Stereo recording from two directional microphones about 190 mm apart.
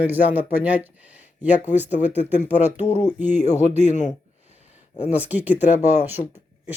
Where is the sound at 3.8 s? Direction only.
40° left (ahead or behind).